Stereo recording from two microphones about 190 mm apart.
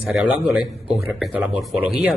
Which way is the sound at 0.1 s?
5° right (ahead or behind).